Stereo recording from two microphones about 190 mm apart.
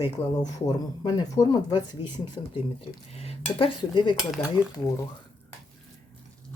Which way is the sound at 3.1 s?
30° left (ahead or behind).